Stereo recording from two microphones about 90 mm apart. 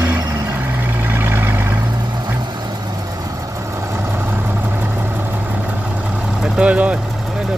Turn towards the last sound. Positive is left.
turn(degrees=-15)  # may be behind; listen again after turning